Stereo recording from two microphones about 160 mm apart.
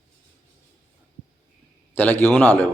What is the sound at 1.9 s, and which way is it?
Speech, 10° left (ahead or behind).